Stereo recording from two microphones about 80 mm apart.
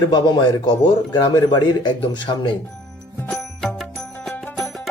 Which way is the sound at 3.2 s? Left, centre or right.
Centre.